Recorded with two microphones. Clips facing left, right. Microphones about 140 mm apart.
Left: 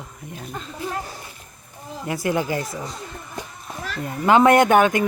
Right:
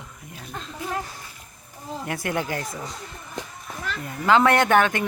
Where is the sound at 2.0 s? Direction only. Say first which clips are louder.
Left 5 dB; 5° left (ahead or behind).